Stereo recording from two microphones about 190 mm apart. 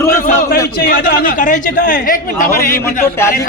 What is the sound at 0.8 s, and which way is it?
A man's voice, 50° left (ahead or behind).